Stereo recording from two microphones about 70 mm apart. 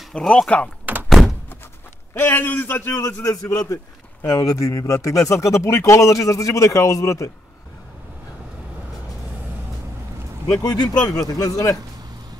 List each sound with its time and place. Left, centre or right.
0.1 s a man's voice: centre
1.0 s thunk: centre
2.1 s a man's voice: left
2.9 s speech: left
10.6 s speech: left